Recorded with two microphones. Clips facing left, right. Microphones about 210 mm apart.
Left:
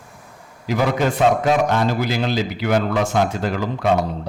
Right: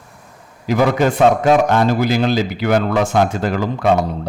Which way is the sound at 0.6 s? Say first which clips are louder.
Right 4 dB; 50° right (ahead or behind).